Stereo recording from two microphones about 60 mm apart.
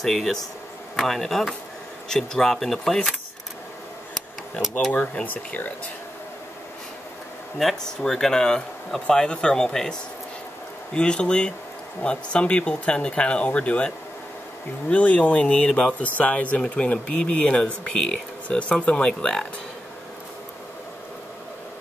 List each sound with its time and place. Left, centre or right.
0.0 s speech: centre
4.9 s speech: left
7.6 s speech: centre
11.0 s speech: centre